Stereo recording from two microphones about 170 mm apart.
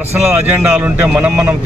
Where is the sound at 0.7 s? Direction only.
5° right (ahead or behind).